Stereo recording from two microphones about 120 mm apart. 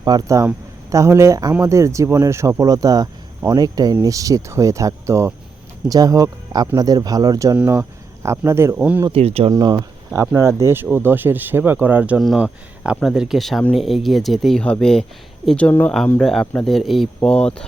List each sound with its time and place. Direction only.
0.0 s speech: 30° right (ahead or behind)
7.5 s speech: 15° right (ahead or behind)
8.8 s speech: 10° right (ahead or behind)
9.0 s speech: 55° right (ahead or behind)
9.5 s speech: 35° right (ahead or behind); by 17.7 s 10° left (ahead or behind)